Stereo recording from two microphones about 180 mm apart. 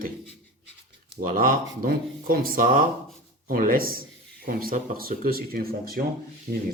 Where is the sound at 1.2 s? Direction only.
50° right (ahead or behind).